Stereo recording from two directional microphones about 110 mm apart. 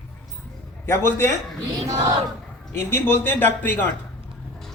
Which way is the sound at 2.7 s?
20° left (ahead or behind).